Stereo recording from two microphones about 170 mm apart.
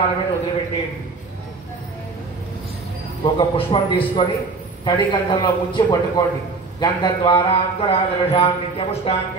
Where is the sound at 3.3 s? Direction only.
30° left (ahead or behind).